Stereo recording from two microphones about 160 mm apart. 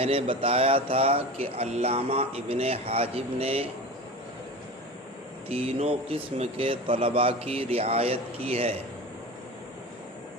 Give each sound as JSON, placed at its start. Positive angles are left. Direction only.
{"t": 0.0, "sound": "speech", "side_deg": -35}
{"t": 5.5, "sound": "speech", "side_deg": -40}